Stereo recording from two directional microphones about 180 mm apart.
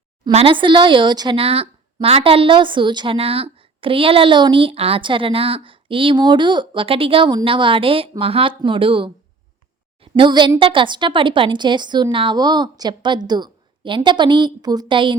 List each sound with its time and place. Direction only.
0.3 s speech: 30° right (ahead or behind)